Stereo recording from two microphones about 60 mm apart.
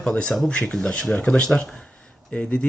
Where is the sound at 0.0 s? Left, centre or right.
Centre.